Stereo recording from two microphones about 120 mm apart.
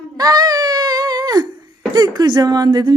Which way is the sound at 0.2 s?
30° right (ahead or behind).